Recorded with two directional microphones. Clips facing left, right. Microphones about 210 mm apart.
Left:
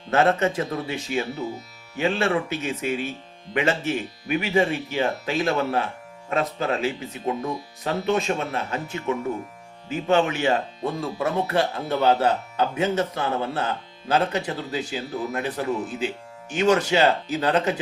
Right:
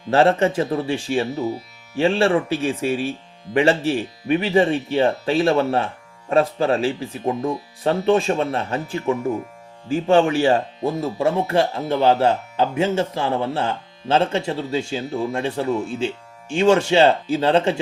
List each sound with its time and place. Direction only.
0.1 s speech: 30° right (ahead or behind)